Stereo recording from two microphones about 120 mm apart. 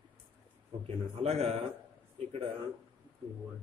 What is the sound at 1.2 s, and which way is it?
Speech, 60° right (ahead or behind).